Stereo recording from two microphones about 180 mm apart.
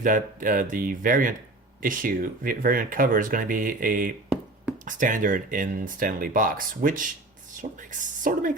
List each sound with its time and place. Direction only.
0.0 s speech: 50° right (ahead or behind)